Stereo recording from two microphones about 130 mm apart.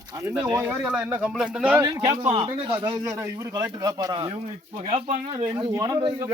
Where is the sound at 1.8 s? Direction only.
25° right (ahead or behind).